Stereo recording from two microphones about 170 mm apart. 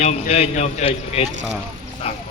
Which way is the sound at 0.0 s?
40° left (ahead or behind).